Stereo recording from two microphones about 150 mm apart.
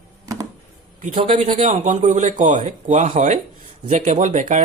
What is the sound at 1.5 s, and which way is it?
Speech, 50° right (ahead or behind).